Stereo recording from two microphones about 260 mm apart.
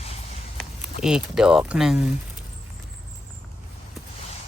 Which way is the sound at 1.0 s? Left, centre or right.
Centre.